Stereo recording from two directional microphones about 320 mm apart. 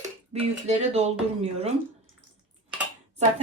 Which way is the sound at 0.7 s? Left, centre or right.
Centre.